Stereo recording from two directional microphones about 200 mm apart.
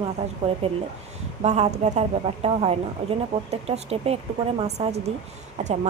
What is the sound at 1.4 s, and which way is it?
A woman's voice, 35° right (ahead or behind).